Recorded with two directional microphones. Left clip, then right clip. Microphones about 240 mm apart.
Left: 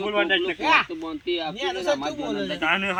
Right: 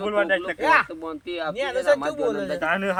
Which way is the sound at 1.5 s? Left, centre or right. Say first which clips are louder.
Right 8 dB; right.